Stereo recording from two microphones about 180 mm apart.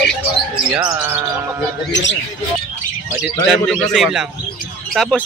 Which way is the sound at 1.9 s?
90° left.